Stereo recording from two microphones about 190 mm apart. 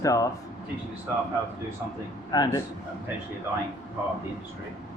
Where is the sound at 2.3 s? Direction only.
20° left (ahead or behind).